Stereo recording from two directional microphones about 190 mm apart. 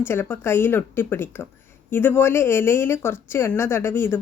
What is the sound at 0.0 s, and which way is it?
A woman's voice, 10° left (ahead or behind).